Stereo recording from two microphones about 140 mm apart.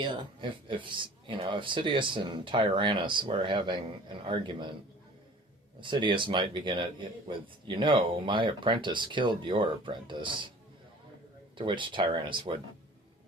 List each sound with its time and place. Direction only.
0.7 s speech: 35° right (ahead or behind)
5.8 s speech: 35° right (ahead or behind)
11.5 s speech: 35° right (ahead or behind)